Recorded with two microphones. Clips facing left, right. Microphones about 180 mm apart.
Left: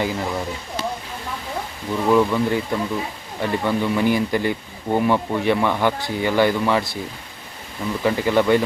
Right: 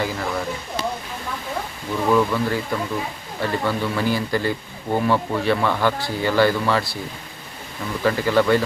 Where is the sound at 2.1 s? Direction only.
15° left (ahead or behind).